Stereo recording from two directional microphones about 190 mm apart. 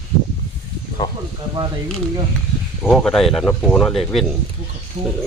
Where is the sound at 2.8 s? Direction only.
5° left (ahead or behind).